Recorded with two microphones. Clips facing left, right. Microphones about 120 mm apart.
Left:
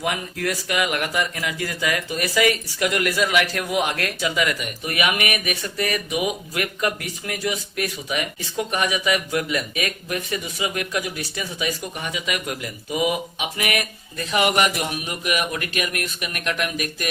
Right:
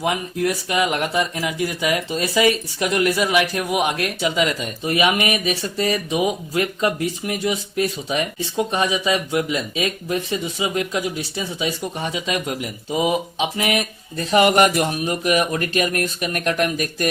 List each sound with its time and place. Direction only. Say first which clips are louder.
0.0 s speech: right 4 dB; 20° right (ahead or behind); by 17.1 s 40° right (ahead or behind)